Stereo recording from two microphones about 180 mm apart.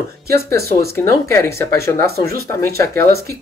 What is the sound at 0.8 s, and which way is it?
Speech, 60° right (ahead or behind).